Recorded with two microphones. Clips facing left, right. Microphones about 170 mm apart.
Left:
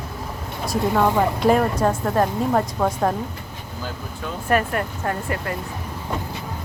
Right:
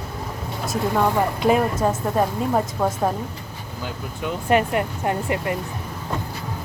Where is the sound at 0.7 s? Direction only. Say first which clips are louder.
Left 2 dB; centre (ahead or behind).